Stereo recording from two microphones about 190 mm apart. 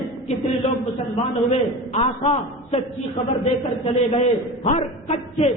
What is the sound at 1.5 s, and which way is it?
A man's voice, 35° left (ahead or behind).